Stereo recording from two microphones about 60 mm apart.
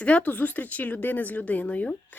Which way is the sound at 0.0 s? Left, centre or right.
Left.